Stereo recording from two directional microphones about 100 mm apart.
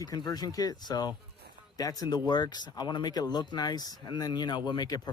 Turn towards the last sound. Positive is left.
turn(degrees=45)  # may be behind; listen again after turning